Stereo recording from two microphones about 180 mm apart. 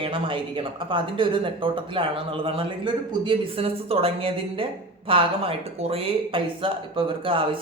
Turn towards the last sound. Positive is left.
turn(degrees=-30)  # may be behind; listen again after turning